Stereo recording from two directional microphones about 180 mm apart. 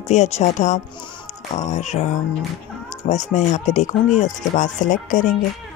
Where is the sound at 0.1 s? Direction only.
40° left (ahead or behind).